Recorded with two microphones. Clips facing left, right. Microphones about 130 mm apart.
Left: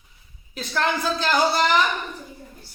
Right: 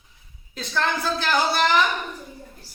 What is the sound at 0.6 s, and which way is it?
A woman's voice, 15° left (ahead or behind).